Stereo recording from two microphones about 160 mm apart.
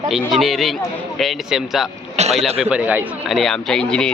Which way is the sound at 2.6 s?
10° right (ahead or behind).